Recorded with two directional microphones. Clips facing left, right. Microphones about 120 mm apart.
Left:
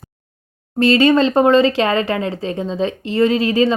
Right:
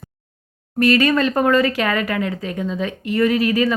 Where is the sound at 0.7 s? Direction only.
25° left (ahead or behind).